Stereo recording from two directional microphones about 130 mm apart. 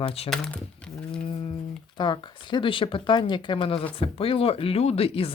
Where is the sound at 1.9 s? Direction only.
35° left (ahead or behind).